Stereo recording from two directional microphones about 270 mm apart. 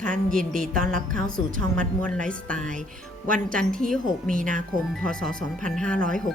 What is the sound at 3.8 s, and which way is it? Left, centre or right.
Speech, right.